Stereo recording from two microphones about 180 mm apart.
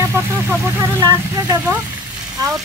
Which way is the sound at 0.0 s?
15° right (ahead or behind).